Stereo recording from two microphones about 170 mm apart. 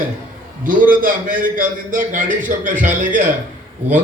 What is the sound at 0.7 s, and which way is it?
A man's voice, 55° right (ahead or behind).